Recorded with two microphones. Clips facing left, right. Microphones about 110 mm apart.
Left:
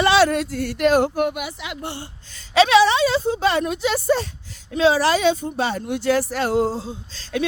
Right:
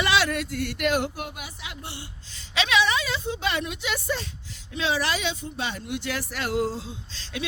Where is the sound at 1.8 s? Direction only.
45° left (ahead or behind).